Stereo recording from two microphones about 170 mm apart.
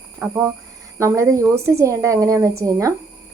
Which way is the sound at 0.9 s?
20° right (ahead or behind).